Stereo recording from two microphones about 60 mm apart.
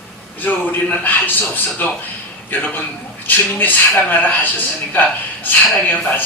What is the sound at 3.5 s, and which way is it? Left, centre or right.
A man's voice, left.